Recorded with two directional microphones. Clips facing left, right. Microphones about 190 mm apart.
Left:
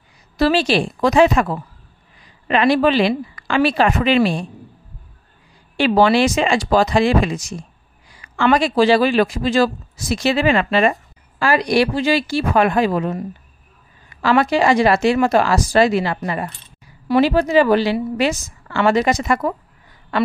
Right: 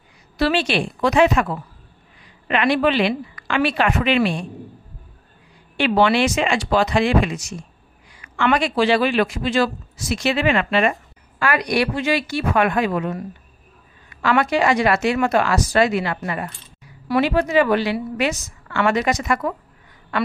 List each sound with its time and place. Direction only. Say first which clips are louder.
0.4 s speech: left 4 dB; 35° left (ahead or behind)
5.8 s speech: left 3 dB; 35° left (ahead or behind)